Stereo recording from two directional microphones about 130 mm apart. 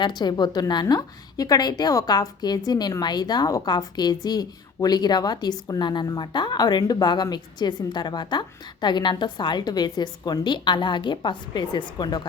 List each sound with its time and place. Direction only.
0.0 s a woman's voice: 35° left (ahead or behind)